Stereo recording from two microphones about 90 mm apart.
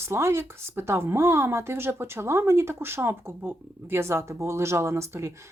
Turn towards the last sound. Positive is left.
turn(degrees=-35)  # may be behind; listen again after turning